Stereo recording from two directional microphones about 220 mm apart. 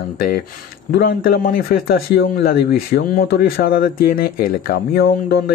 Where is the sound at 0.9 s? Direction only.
45° left (ahead or behind).